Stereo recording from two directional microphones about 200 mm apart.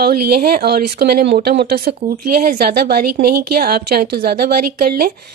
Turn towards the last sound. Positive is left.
turn(degrees=-50)  # may be behind; listen again after turning